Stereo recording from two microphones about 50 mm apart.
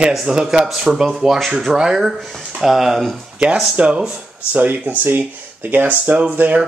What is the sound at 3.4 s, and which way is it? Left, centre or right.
Speech, right.